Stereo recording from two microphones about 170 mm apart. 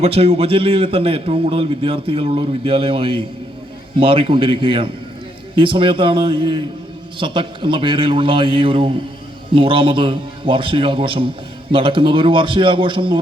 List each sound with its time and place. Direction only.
0.0 s a man's voice: 35° right (ahead or behind)